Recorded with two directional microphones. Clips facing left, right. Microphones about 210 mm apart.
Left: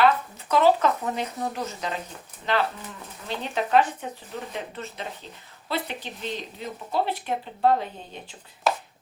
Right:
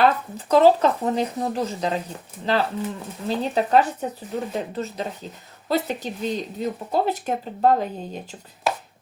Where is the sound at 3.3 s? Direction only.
35° right (ahead or behind).